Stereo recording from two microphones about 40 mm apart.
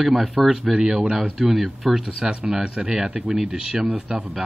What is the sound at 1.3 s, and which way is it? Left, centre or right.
Speech, centre.